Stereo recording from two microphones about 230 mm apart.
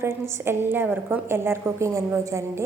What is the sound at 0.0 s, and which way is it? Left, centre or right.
A woman's voice, centre.